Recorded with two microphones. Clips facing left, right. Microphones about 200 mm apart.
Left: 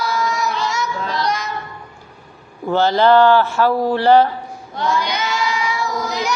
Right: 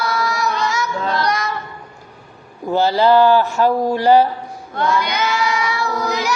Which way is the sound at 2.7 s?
10° right (ahead or behind).